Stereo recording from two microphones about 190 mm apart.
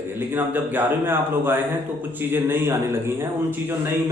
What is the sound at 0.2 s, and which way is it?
A man's voice, 10° right (ahead or behind).